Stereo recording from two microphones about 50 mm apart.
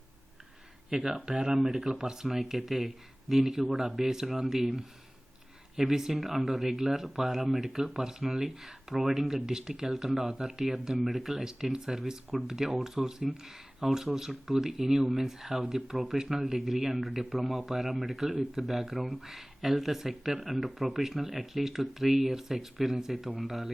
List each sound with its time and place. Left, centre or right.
0.9 s speech: centre